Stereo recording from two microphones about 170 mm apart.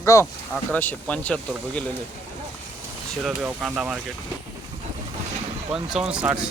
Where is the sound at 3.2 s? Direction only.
5° right (ahead or behind).